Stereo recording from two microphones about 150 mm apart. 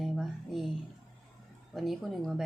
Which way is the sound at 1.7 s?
Centre (ahead or behind).